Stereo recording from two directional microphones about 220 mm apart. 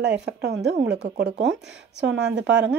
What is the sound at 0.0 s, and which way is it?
A woman's voice, 50° right (ahead or behind).